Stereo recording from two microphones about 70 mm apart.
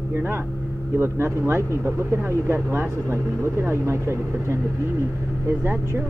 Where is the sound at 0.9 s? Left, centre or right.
Right.